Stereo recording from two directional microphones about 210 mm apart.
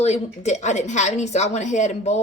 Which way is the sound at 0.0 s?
30° left (ahead or behind).